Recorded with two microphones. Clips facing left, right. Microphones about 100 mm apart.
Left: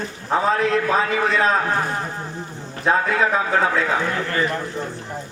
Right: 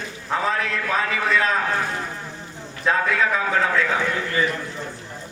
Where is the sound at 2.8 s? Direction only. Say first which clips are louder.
Left 2 dB; 35° left (ahead or behind).